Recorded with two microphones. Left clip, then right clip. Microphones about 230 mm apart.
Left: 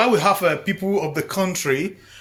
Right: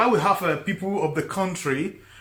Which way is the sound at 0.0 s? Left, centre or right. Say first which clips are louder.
Left 3 dB; left.